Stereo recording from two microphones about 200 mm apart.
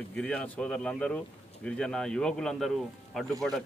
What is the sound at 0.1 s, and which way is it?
Speech, 5° left (ahead or behind).